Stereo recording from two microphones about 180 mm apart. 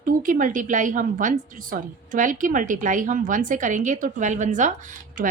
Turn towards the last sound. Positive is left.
turn(degrees=-50)  # may be behind; listen again after turning